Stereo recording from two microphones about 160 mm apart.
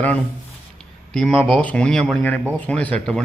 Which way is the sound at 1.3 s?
35° right (ahead or behind).